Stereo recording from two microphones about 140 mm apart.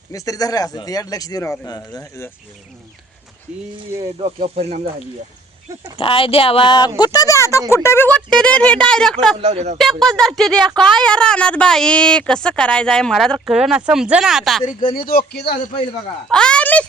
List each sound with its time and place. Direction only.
0.1 s speech: 25° left (ahead or behind)
4.2 s speech: 45° right (ahead or behind)
6.0 s speech: 40° left (ahead or behind); by 9.1 s 5° left (ahead or behind)
9.4 s speech: 50° right (ahead or behind)
10.0 s speech: 5° left (ahead or behind)
14.6 s speech: 60° left (ahead or behind)
14.9 s speech: 90° left
16.3 s speech: 5° left (ahead or behind)